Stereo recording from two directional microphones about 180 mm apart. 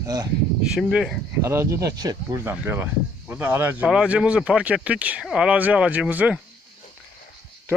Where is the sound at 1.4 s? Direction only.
15° right (ahead or behind).